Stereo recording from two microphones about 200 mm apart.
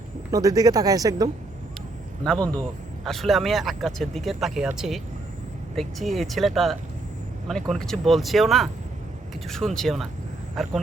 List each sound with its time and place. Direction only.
0.3 s speech: 15° right (ahead or behind)
2.2 s speech: 5° left (ahead or behind)